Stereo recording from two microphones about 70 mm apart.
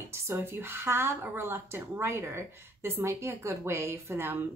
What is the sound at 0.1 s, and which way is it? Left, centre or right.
A woman's voice, right.